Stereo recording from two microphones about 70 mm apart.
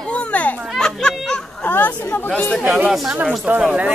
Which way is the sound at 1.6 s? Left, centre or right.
Left.